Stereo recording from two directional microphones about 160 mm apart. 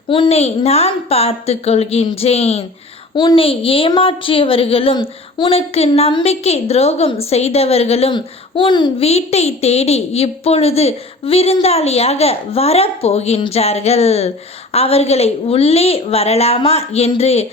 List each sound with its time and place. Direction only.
0.1 s a woman's voice: 35° left (ahead or behind)
9.0 s a woman's voice: 40° left (ahead or behind)